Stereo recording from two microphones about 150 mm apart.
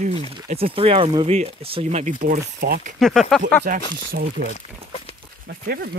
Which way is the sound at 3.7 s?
65° right (ahead or behind).